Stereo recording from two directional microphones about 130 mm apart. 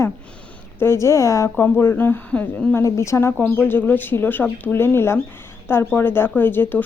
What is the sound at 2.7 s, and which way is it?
Speech, 20° left (ahead or behind).